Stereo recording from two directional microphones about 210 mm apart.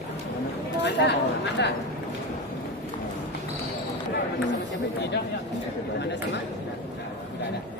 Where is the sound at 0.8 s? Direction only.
55° left (ahead or behind).